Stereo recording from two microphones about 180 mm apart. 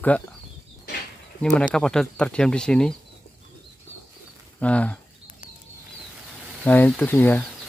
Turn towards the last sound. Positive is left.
turn(degrees=10)  # may be behind; listen again after turning